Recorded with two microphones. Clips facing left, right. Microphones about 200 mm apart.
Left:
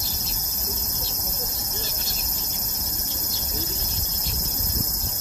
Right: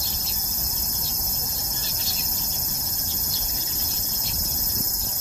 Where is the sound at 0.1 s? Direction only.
30° right (ahead or behind).